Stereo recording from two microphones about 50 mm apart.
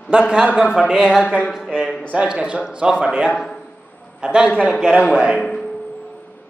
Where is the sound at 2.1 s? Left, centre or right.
Centre.